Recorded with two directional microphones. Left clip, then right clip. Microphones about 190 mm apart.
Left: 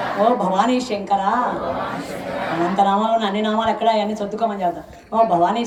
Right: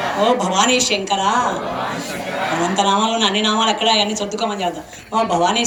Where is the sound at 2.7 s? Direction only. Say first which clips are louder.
Left 1 dB; 50° left (ahead or behind).